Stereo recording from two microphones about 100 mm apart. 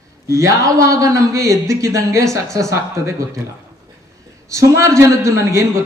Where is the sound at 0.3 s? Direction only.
35° right (ahead or behind).